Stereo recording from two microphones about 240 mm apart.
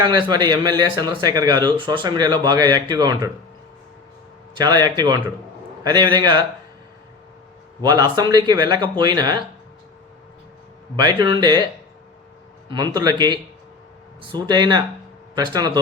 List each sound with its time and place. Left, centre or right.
0.0 s speech: centre
4.5 s speech: centre
7.8 s speech: centre
10.9 s speech: centre
12.7 s speech: centre